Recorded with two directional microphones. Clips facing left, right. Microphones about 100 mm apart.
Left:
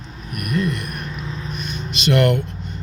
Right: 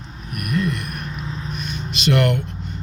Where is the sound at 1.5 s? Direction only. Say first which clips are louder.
Even; 5° right (ahead or behind).